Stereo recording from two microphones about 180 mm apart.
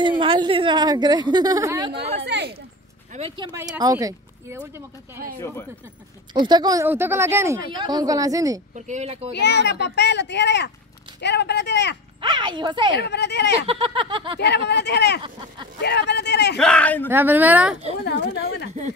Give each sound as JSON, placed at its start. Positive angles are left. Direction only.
{"t": 0.0, "sound": "a woman's voice", "side_deg": -25}
{"t": 2.2, "sound": "a sound", "side_deg": -70}
{"t": 3.2, "sound": "a woman's voice", "side_deg": -30}
{"t": 6.3, "sound": "a woman's voice", "side_deg": -25}
{"t": 8.7, "sound": "speech", "side_deg": -40}
{"t": 9.3, "sound": "a child's voice", "side_deg": 70}
{"t": 12.2, "sound": "a woman's voice", "side_deg": -25}
{"t": 12.9, "sound": "a child's voice", "side_deg": 70}
{"t": 13.7, "sound": "a woman's voice", "side_deg": -30}
{"t": 14.7, "sound": "a child's voice", "side_deg": 70}
{"t": 16.5, "sound": "speech", "side_deg": 5}
{"t": 17.1, "sound": "speech", "side_deg": -10}
{"t": 18.0, "sound": "a child's voice", "side_deg": 65}